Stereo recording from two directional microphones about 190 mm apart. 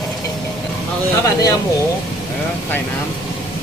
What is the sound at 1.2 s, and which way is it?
Speech, 15° left (ahead or behind).